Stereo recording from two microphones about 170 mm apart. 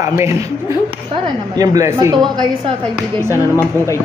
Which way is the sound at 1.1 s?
20° right (ahead or behind).